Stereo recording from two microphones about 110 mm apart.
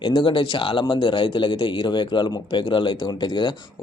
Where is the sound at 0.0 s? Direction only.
50° left (ahead or behind).